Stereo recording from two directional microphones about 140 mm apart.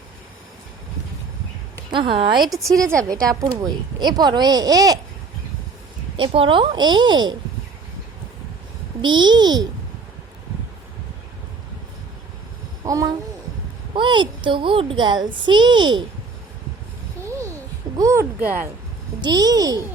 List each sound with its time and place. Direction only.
1.9 s a woman's voice: 40° right (ahead or behind)
6.1 s a woman's voice: 40° right (ahead or behind)
9.0 s a woman's voice: 35° right (ahead or behind)
12.8 s a sound: 25° right (ahead or behind)
13.9 s a woman's voice: 35° right (ahead or behind)
17.9 s speech: 20° right (ahead or behind)
19.2 s speech: 30° right (ahead or behind)